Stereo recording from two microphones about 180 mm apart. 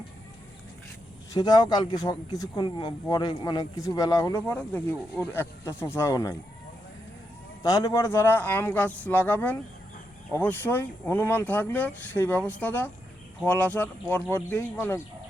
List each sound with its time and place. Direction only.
1.3 s speech: 25° left (ahead or behind)
7.6 s speech: 20° left (ahead or behind)